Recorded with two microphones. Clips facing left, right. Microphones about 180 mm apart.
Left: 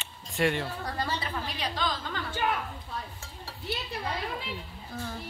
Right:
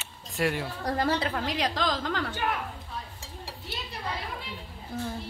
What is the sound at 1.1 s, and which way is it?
A woman's voice, 70° right (ahead or behind).